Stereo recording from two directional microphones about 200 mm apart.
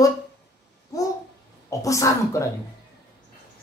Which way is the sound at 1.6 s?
15° left (ahead or behind).